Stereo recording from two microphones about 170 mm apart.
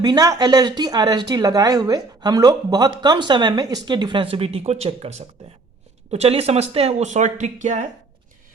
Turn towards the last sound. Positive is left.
turn(degrees=-45)  # may be behind; listen again after turning